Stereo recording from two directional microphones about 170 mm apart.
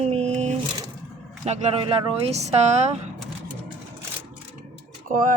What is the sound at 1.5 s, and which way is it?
Speech, 35° right (ahead or behind).